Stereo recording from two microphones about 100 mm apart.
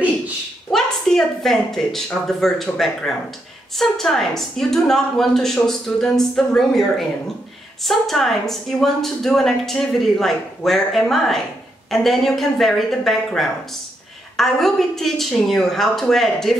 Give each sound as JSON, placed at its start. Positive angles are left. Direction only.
{"t": 0.7, "sound": "a woman's voice", "side_deg": 5}